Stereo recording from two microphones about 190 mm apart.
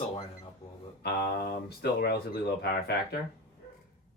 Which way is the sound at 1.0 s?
60° left (ahead or behind).